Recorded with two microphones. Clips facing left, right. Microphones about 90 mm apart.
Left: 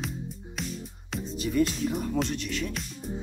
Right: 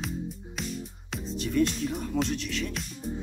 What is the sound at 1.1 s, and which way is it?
Speech, centre (ahead or behind).